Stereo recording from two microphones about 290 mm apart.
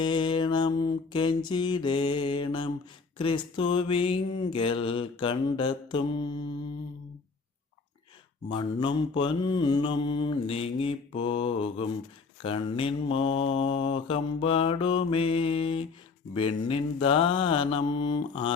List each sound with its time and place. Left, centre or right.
0.0 s mantra: centre
8.4 s mantra: centre